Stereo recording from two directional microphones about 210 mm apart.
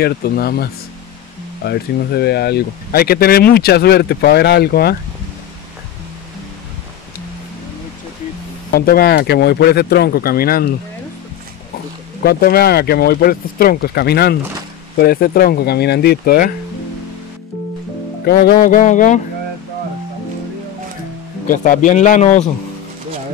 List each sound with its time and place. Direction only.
0.0 s speech: 45° left (ahead or behind)
8.7 s speech: 45° left (ahead or behind)
12.2 s speech: 50° left (ahead or behind)
18.2 s music: 50° left (ahead or behind)
21.5 s music: 40° left (ahead or behind)